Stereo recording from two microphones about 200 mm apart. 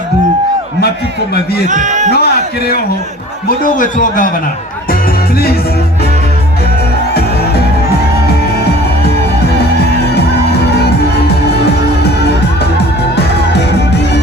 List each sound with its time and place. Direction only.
1.6 s a man's voice: 40° right (ahead or behind)
2.1 s a man's voice: 55° left (ahead or behind)
3.6 s a man's voice: 40° left (ahead or behind)
13.1 s music: 55° left (ahead or behind)